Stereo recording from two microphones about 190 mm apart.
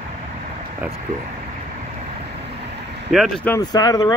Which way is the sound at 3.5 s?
20° left (ahead or behind).